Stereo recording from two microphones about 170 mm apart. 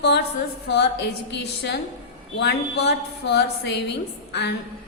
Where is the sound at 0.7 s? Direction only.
85° left.